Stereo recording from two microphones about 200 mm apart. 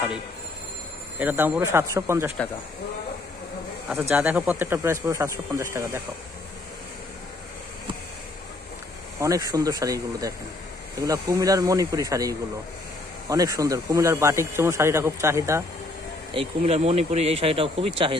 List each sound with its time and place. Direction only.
1.2 s speech: 10° right (ahead or behind)
4.1 s speech: 5° right (ahead or behind)
9.2 s speech: 15° right (ahead or behind)
16.3 s speech: 30° right (ahead or behind)